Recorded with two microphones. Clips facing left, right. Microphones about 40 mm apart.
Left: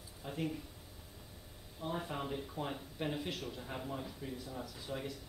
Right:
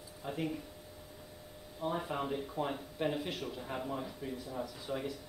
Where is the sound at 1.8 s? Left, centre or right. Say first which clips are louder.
Right 4 dB; centre.